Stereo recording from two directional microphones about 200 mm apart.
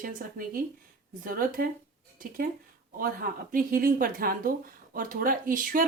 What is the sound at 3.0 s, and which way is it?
A woman's voice, 45° right (ahead or behind).